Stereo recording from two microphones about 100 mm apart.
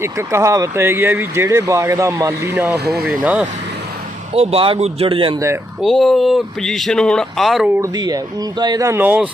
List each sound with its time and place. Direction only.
0.0 s speech: 25° right (ahead or behind)
2.9 s speech: centre (ahead or behind)
4.4 s speech: 65° right (ahead or behind)
5.8 s speech: centre (ahead or behind)
7.9 s speech: 40° right (ahead or behind)
8.9 s speech: 20° right (ahead or behind)